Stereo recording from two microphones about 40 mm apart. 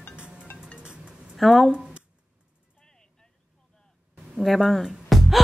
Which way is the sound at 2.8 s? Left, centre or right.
Centre.